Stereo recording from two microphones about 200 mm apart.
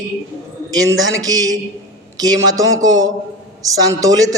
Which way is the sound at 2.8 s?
15° right (ahead or behind).